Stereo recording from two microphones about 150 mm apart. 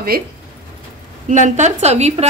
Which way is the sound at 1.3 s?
55° right (ahead or behind).